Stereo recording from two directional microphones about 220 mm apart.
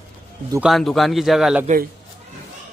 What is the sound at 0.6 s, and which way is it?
A man's voice, centre (ahead or behind).